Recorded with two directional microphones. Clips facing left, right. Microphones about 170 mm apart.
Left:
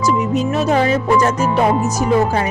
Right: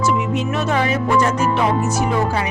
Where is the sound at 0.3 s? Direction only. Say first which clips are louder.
Left 4 dB; 35° left (ahead or behind).